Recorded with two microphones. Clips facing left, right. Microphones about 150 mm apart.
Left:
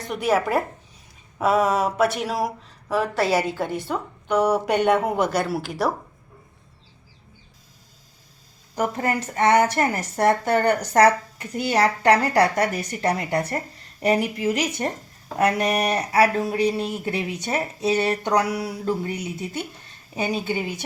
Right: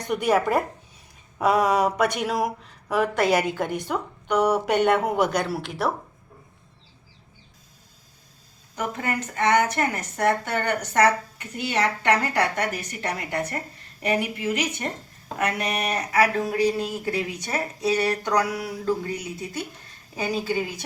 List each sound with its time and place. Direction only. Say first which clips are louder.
0.1 s a woman's voice: even; centre (ahead or behind)
8.7 s a woman's voice: left 4 dB; 30° left (ahead or behind)